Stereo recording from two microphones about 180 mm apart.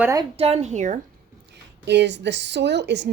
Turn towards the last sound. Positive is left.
turn(degrees=-70)  # may be behind; listen again after turning